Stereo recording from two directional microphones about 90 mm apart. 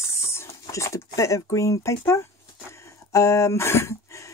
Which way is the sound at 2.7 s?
35° left (ahead or behind).